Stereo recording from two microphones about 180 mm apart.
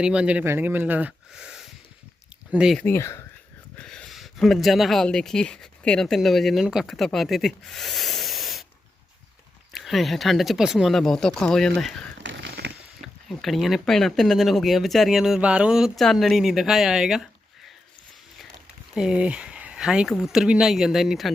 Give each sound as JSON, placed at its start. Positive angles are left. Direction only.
{"t": 0.0, "sound": "speech", "side_deg": -5}
{"t": 2.8, "sound": "speech", "side_deg": 15}
{"t": 3.8, "sound": "speech", "side_deg": 5}
{"t": 9.7, "sound": "speech", "side_deg": 0}
{"t": 12.2, "sound": "a sound", "side_deg": -85}
{"t": 13.2, "sound": "speech", "side_deg": 0}
{"t": 18.9, "sound": "speech", "side_deg": -5}